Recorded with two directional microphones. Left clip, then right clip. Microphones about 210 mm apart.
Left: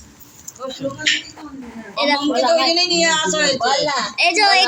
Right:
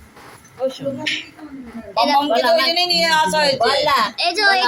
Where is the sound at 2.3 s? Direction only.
55° right (ahead or behind).